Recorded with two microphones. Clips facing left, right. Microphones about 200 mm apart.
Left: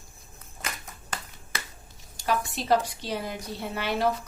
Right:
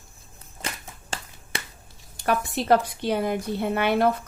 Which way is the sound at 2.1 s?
60° right (ahead or behind).